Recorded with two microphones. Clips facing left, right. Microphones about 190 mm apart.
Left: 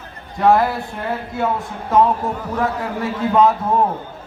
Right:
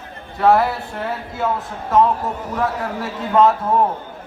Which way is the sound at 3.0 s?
Centre (ahead or behind).